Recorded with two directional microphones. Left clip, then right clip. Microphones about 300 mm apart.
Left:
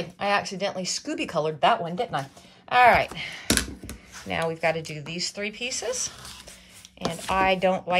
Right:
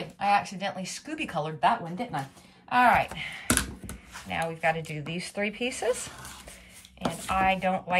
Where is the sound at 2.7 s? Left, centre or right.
Centre.